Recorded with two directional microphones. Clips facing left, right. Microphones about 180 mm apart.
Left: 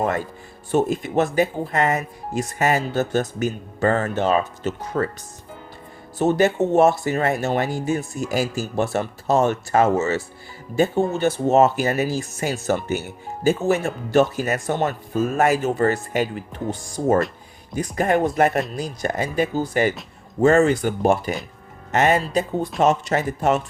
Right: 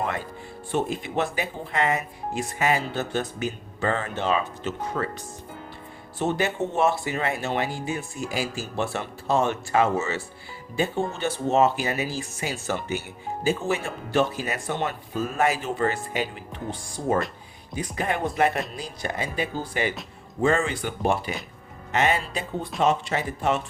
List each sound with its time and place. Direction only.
0.7 s speech: 45° left (ahead or behind)
6.1 s speech: 40° left (ahead or behind)